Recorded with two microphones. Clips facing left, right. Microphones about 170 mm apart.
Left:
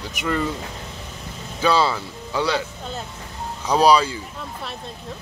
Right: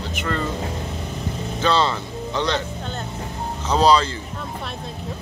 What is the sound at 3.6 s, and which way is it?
Speech, 10° left (ahead or behind).